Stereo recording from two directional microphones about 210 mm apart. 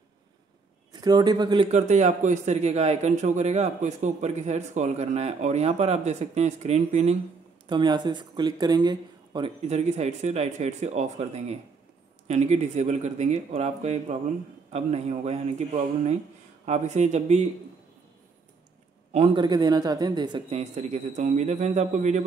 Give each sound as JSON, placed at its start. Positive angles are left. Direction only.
{"t": 1.0, "sound": "speech", "side_deg": -20}
{"t": 1.7, "sound": "speech", "side_deg": -35}
{"t": 7.6, "sound": "speech", "side_deg": -20}
{"t": 19.1, "sound": "speech", "side_deg": -25}